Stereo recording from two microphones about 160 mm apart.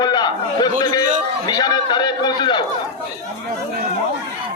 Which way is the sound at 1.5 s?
25° left (ahead or behind).